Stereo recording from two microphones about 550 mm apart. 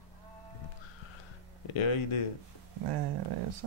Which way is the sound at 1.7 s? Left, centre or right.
Left.